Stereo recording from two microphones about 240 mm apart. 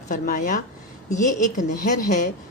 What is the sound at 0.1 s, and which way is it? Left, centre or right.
A woman's voice, left.